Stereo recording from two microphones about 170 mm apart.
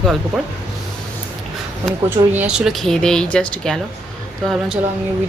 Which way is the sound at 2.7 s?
Centre (ahead or behind).